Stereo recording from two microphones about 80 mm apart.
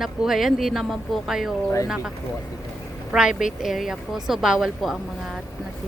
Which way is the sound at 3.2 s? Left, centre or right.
Centre.